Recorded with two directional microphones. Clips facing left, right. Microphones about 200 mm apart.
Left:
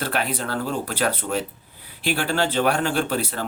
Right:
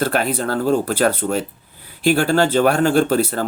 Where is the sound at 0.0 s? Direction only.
45° right (ahead or behind).